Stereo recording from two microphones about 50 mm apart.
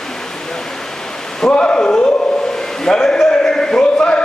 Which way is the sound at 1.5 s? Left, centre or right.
Left.